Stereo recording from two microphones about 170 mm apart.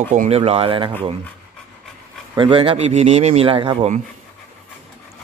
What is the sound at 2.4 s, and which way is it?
Speech, 30° right (ahead or behind).